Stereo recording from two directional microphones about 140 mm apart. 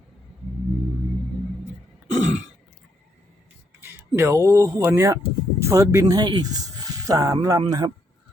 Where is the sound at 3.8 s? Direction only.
20° right (ahead or behind).